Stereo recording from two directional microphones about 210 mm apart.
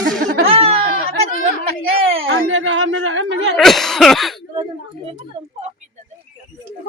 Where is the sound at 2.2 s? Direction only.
65° right (ahead or behind).